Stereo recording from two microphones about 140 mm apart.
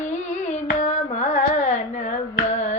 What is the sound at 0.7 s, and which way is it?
Carnatic music, 60° left (ahead or behind).